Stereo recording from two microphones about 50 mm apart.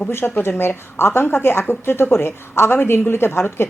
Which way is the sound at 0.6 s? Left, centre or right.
Left.